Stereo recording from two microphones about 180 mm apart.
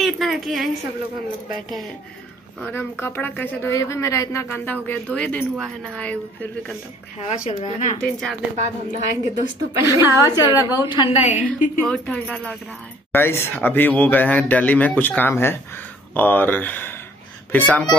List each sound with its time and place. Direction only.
0.0 s a sound: centre (ahead or behind)
1.5 s speech: centre (ahead or behind)
2.6 s speech: 10° left (ahead or behind)
7.2 s speech: 35° left (ahead or behind)
8.0 s speech: centre (ahead or behind)
8.5 s a woman's voice: 40° right (ahead or behind)
9.8 s a woman's voice: 15° right (ahead or behind)
10.2 s a woman's voice: 20° left (ahead or behind)
11.2 s a woman's voice: 45° left (ahead or behind)
11.9 s speech: 5° left (ahead or behind)